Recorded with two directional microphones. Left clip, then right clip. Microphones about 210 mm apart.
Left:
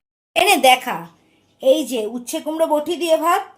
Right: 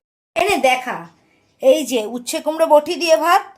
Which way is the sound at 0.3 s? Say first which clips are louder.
Left 2 dB; centre (ahead or behind).